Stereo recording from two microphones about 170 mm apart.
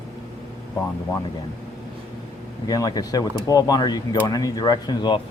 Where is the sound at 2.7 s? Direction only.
20° left (ahead or behind).